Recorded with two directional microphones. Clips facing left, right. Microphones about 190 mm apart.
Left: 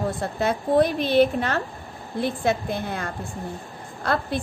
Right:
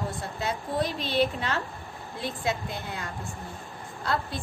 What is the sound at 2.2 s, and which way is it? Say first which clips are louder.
A woman's voice: left 7 dB; 65° left (ahead or behind).